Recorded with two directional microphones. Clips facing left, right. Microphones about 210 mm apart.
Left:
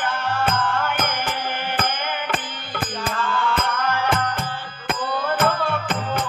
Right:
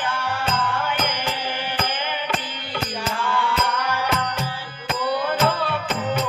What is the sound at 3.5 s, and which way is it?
Music, 50° left (ahead or behind).